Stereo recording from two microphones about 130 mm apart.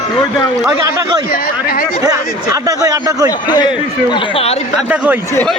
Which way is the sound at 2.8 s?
25° right (ahead or behind).